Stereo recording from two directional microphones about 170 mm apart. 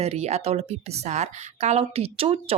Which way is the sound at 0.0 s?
40° right (ahead or behind).